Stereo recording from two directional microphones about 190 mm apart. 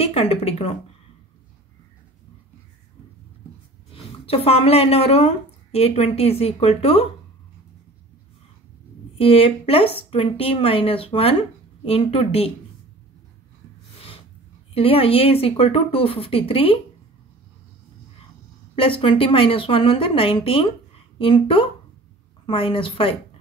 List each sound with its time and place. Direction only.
0.0 s speech: 30° left (ahead or behind)
4.3 s a woman's voice: 30° left (ahead or behind)
9.2 s a woman's voice: 30° left (ahead or behind)
14.7 s speech: 30° left (ahead or behind)
18.8 s speech: 30° left (ahead or behind)